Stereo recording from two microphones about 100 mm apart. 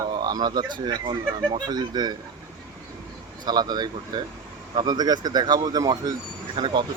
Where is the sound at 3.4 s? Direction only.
45° right (ahead or behind).